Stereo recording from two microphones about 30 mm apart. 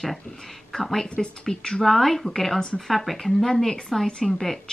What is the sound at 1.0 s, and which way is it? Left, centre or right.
Speech, left.